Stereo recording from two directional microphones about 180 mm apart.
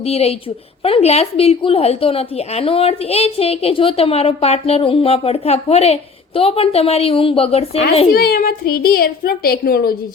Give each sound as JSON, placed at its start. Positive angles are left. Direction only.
{"t": 0.1, "sound": "a woman's voice", "side_deg": 35}
{"t": 8.1, "sound": "a woman's voice", "side_deg": 60}